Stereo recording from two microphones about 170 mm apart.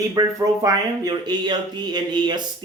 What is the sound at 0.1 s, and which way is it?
Speech, 20° right (ahead or behind).